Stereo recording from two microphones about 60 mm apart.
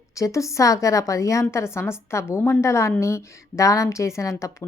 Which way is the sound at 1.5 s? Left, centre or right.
Left.